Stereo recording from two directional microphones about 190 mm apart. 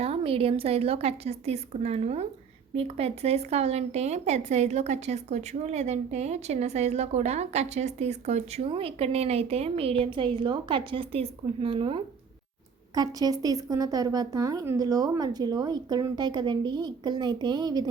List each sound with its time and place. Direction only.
0.0 s speech: 30° right (ahead or behind)